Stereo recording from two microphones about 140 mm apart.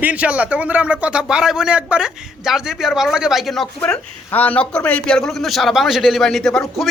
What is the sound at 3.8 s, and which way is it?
Speech, 10° left (ahead or behind).